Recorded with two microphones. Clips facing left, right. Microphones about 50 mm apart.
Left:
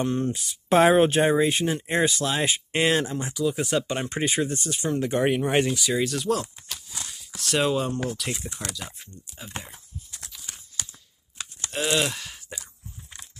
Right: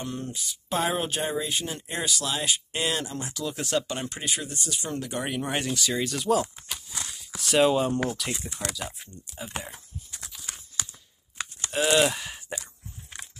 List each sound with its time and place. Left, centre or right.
0.0 s speech: left
3.1 s speech: left
4.2 s speech: left
5.8 s speech: centre
11.7 s speech: centre